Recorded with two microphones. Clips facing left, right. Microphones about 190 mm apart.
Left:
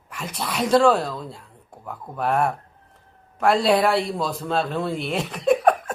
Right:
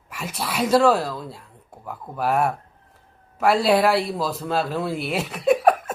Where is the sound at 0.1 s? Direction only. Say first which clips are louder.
Even; 5° right (ahead or behind).